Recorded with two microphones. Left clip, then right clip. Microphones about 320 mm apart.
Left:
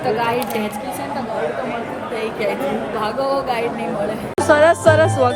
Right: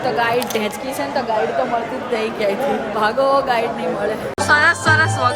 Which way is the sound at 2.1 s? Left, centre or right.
Centre.